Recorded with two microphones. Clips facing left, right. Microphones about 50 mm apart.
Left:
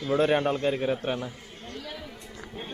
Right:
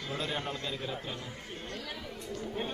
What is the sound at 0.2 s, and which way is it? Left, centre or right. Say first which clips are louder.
A man's voice: left 13 dB; left.